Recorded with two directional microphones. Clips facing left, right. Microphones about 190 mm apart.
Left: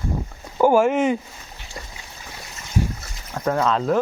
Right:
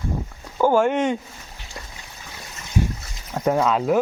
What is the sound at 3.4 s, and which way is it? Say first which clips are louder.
Speech: right 1 dB; 10° right (ahead or behind).